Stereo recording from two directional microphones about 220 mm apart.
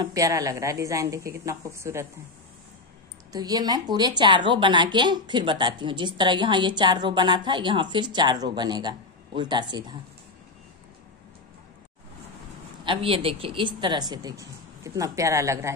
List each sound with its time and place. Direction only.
0.0 s a woman's voice: 15° right (ahead or behind)
3.3 s a woman's voice: 15° right (ahead or behind)
12.8 s a woman's voice: 25° right (ahead or behind)